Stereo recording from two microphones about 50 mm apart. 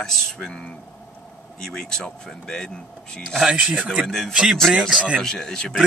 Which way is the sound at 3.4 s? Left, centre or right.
Right.